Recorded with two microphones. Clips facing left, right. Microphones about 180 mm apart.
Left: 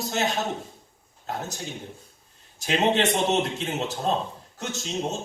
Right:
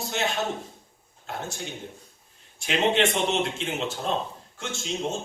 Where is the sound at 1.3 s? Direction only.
40° left (ahead or behind).